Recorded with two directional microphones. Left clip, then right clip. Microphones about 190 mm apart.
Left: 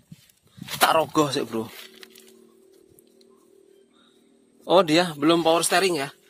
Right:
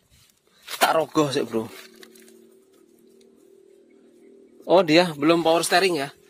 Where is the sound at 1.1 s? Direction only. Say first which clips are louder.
Right 1 dB; 5° right (ahead or behind).